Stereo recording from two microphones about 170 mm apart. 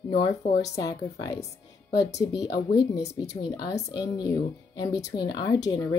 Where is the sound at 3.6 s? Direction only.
20° left (ahead or behind).